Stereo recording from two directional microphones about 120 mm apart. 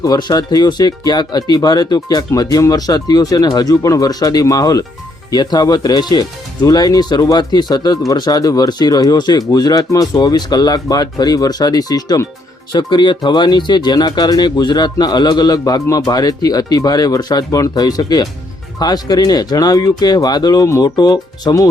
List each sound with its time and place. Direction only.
0.0 s speech: 35° left (ahead or behind)